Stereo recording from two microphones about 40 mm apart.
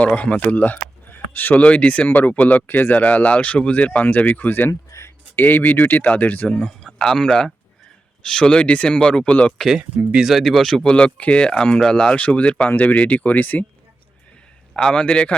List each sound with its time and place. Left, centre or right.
0.2 s speech: left
1.1 s a sound: left
1.6 s speech: left
2.0 s speech: left
2.6 s speech: left
2.9 s speech: left
7.0 s speech: centre; by 9.5 s left
10.2 s speech: centre
10.4 s speech: centre
10.8 s speech: left
12.1 s speech: left
14.8 s speech: centre
15.0 s speech: left